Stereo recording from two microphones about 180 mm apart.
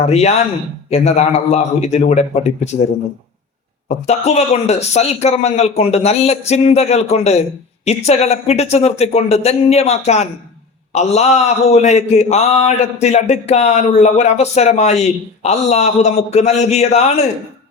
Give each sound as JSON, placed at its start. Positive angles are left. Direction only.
{"t": 0.0, "sound": "a man's voice", "side_deg": 35}
{"t": 3.8, "sound": "a man's voice", "side_deg": 40}